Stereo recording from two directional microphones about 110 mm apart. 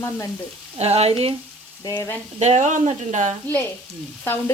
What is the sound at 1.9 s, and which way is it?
Speech, 20° left (ahead or behind).